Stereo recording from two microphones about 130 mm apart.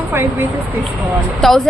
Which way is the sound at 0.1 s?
20° right (ahead or behind).